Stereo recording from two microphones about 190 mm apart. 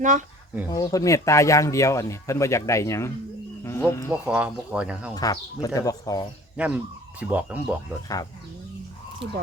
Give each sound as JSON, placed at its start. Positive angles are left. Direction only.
{"t": 0.0, "sound": "speech", "side_deg": -40}
{"t": 0.7, "sound": "speech", "side_deg": 20}
{"t": 4.1, "sound": "speech", "side_deg": -5}
{"t": 5.1, "sound": "speech", "side_deg": 20}
{"t": 6.6, "sound": "speech", "side_deg": -5}